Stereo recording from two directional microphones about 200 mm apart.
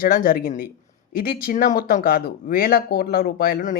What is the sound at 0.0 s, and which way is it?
Speech, 45° left (ahead or behind).